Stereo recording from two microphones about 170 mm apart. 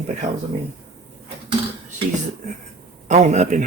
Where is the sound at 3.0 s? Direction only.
45° right (ahead or behind).